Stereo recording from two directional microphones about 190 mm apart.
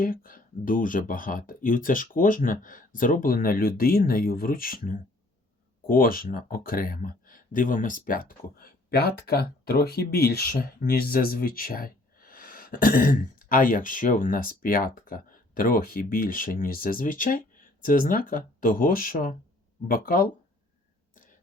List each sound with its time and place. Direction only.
0.0 s speech: 50° left (ahead or behind)